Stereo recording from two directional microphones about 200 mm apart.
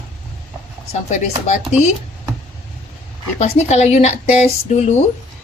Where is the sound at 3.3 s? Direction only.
35° left (ahead or behind).